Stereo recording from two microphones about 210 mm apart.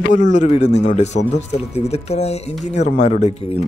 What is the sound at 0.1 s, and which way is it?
Speech, 35° left (ahead or behind).